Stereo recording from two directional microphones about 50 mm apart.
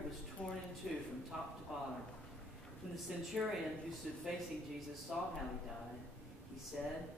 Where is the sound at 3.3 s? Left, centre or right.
Centre.